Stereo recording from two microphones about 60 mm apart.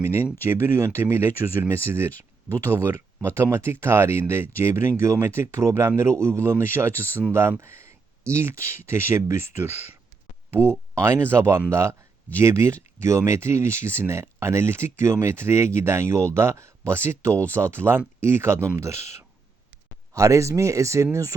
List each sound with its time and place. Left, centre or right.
0.4 s speech: right
3.6 s speech: right